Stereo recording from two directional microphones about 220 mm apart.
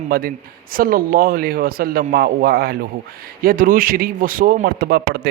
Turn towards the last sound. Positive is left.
turn(degrees=-45)  # may be behind; listen again after turning